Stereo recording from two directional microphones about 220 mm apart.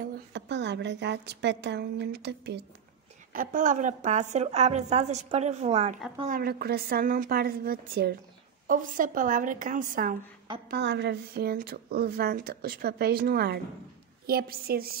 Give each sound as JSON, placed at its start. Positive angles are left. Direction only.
{"t": 0.3, "sound": "speech", "side_deg": -50}
{"t": 3.3, "sound": "a woman's voice", "side_deg": -35}
{"t": 6.2, "sound": "a woman's voice", "side_deg": -40}
{"t": 10.7, "sound": "speech", "side_deg": -50}